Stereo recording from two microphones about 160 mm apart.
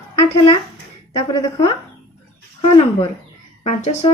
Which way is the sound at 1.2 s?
25° left (ahead or behind).